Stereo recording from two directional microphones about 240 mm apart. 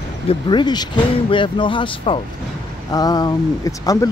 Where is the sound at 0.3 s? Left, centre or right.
Centre.